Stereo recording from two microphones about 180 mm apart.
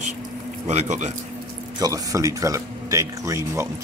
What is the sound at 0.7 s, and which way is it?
Speech, 40° right (ahead or behind).